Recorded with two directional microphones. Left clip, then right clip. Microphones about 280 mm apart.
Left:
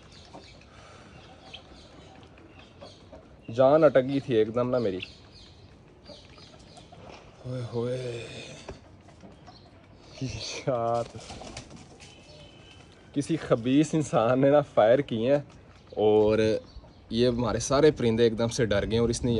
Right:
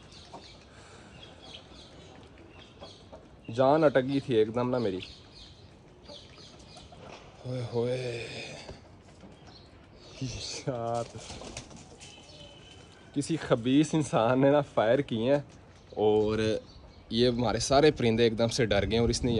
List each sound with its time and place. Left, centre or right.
3.5 s speech: centre
7.4 s speech: centre
10.1 s speech: centre
13.1 s speech: centre